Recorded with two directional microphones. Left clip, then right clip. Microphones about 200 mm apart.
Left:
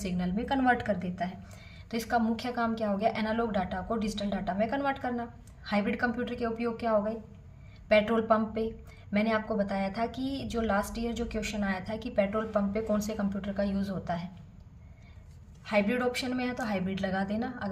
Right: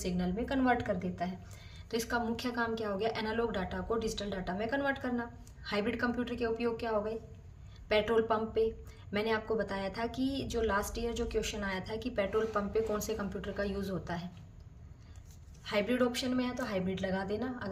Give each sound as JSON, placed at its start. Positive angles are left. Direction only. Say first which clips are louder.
{"t": 0.0, "sound": "a woman's voice", "louder": "left 1 dB", "side_deg": -10}
{"t": 1.9, "sound": "a woman's voice", "louder": "left 4 dB", "side_deg": -20}
{"t": 15.6, "sound": "a woman's voice", "louder": "left 3 dB", "side_deg": -20}